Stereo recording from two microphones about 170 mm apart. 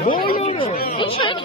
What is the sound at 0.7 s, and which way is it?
Speech, 60° left (ahead or behind).